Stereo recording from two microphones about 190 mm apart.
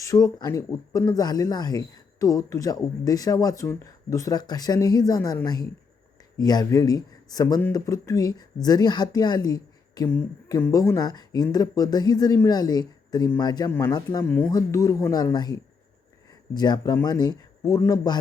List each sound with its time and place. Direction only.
0.0 s speech: 20° left (ahead or behind)
16.6 s speech: 20° left (ahead or behind)